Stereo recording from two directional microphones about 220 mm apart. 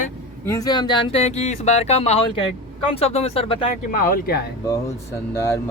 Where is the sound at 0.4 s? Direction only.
15° left (ahead or behind).